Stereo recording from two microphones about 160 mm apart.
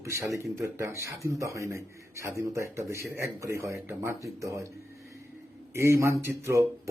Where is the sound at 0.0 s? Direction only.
20° right (ahead or behind).